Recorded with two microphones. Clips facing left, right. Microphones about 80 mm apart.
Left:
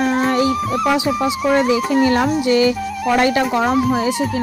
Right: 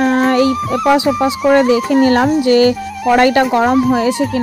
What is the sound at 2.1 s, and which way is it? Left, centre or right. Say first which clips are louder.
Speech: right 4 dB; right.